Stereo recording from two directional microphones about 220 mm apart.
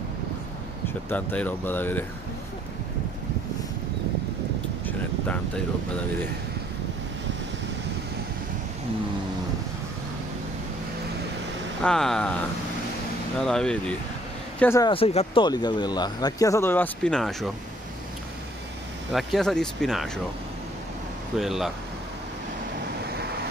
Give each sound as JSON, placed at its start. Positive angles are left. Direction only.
{"t": 0.8, "sound": "speech", "side_deg": 5}
{"t": 11.8, "sound": "speech", "side_deg": 5}
{"t": 13.4, "sound": "speech", "side_deg": 5}
{"t": 14.9, "sound": "speech", "side_deg": 25}
{"t": 19.1, "sound": "speech", "side_deg": 0}
{"t": 21.4, "sound": "speech", "side_deg": 0}